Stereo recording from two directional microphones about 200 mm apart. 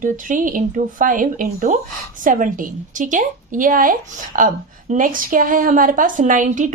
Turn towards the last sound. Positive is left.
turn(degrees=-40)  # may be behind; listen again after turning